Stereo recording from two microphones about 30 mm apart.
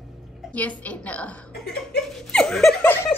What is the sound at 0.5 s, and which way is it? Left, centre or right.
Speech, left.